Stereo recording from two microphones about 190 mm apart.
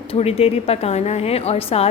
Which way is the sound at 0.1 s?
30° left (ahead or behind).